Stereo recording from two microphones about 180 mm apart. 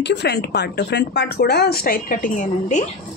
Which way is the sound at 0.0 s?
70° left (ahead or behind).